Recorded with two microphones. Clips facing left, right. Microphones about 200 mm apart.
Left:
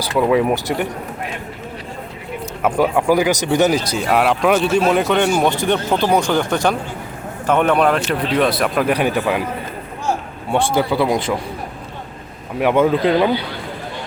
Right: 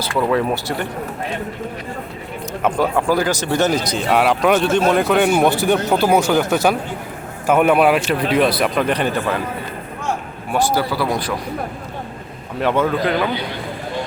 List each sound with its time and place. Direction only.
0.0 s speech: 15° left (ahead or behind)
2.6 s speech: 10° left (ahead or behind)
4.0 s speech: centre (ahead or behind)
10.5 s speech: 20° left (ahead or behind)
12.5 s speech: 15° left (ahead or behind)